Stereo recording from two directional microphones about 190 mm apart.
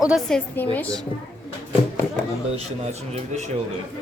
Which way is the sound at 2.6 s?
35° right (ahead or behind).